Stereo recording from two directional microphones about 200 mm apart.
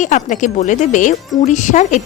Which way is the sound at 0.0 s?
40° left (ahead or behind).